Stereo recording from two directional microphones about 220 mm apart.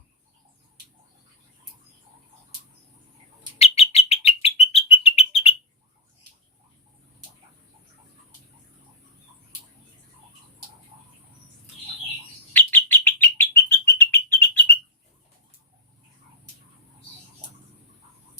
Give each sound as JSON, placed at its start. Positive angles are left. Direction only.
{"t": 3.6, "sound": "bird", "side_deg": 30}
{"t": 12.5, "sound": "bird", "side_deg": 10}